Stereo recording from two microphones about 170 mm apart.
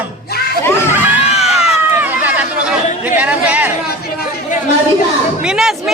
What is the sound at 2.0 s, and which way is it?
Chatter, 10° right (ahead or behind).